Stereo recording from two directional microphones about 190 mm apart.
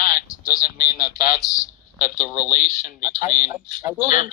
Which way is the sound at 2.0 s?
45° left (ahead or behind).